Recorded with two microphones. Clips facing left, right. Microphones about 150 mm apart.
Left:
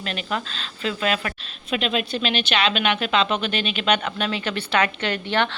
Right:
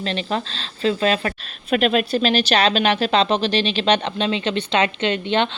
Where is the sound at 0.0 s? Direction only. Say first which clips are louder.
Right 4 dB; 30° right (ahead or behind).